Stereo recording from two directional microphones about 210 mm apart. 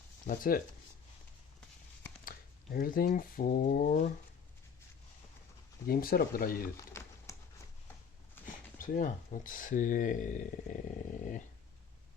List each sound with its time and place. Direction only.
0.3 s speech: 40° left (ahead or behind)
2.2 s speech: 45° left (ahead or behind)
5.8 s speech: 45° left (ahead or behind)
6.7 s typing: 15° left (ahead or behind)
8.4 s a sound: 10° left (ahead or behind)
8.8 s speech: 40° left (ahead or behind)
11.2 s dog: 40° left (ahead or behind)